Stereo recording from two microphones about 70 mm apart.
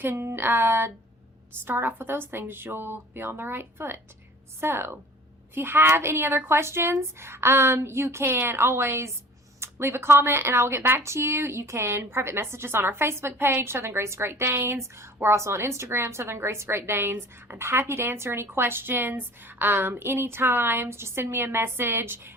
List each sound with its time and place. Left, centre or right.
0.0 s speech: right